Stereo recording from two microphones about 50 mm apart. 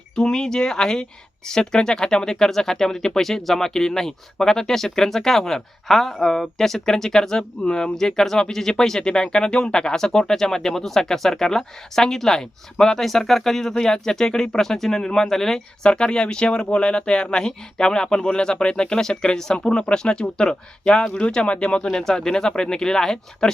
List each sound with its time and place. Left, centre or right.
0.2 s speech: centre
15.9 s speech: centre